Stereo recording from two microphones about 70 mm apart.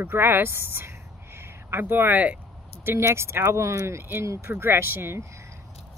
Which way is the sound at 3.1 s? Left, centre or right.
Right.